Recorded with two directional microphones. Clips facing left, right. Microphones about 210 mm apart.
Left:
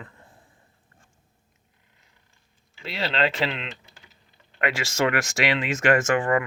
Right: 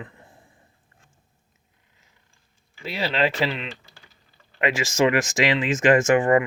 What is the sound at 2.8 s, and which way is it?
Speech, 10° right (ahead or behind).